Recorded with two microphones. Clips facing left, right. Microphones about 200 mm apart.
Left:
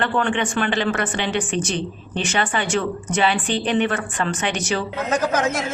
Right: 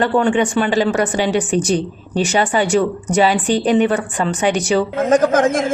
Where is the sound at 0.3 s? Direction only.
40° right (ahead or behind).